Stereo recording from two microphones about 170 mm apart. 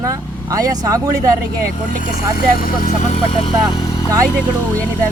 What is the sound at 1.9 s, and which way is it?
Speech, 55° left (ahead or behind).